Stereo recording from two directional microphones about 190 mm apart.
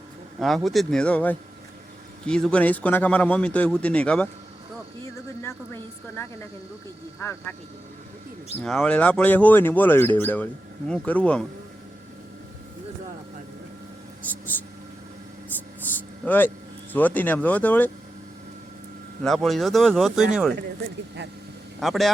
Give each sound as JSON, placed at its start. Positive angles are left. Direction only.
{"t": 0.3, "sound": "speech", "side_deg": 0}
{"t": 8.6, "sound": "speech", "side_deg": 5}
{"t": 16.2, "sound": "speech", "side_deg": 10}
{"t": 19.2, "sound": "speech", "side_deg": 0}
{"t": 21.8, "sound": "speech", "side_deg": 0}